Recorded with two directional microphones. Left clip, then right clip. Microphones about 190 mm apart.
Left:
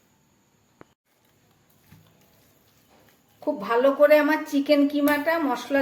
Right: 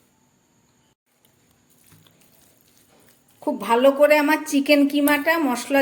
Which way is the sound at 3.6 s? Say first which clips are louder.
Right 3 dB; 35° right (ahead or behind).